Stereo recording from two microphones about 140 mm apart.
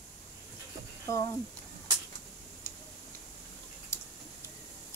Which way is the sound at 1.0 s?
20° left (ahead or behind).